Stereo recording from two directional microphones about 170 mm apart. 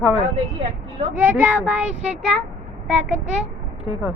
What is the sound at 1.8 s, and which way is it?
Speech, 40° right (ahead or behind).